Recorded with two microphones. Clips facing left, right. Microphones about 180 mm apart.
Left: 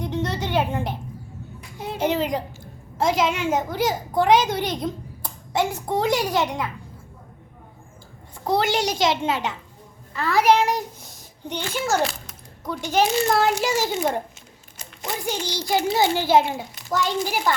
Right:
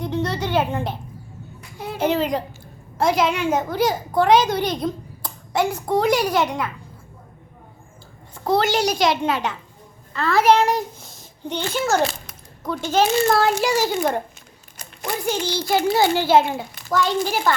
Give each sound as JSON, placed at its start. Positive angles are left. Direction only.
{"t": 0.0, "sound": "a sound", "side_deg": 20}
{"t": 1.8, "sound": "a child's voice", "side_deg": 20}
{"t": 8.4, "sound": "a child's voice", "side_deg": 15}
{"t": 12.6, "sound": "a child's voice", "side_deg": 15}